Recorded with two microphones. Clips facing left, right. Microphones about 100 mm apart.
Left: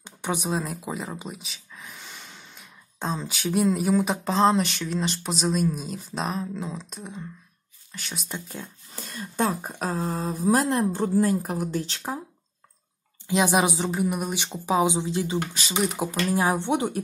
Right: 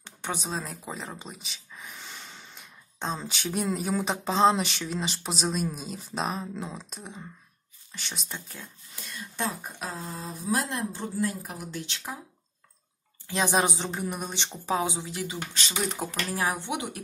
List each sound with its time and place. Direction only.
0.0 s speech: 15° left (ahead or behind)
8.3 s speech: 20° left (ahead or behind)
8.9 s speech: 40° left (ahead or behind)
9.9 s mantra: 55° left (ahead or behind)
10.7 s a woman's voice: 50° left (ahead or behind)
13.3 s speech: 15° left (ahead or behind)
15.8 s speech: 10° left (ahead or behind); by 17.0 s 35° left (ahead or behind)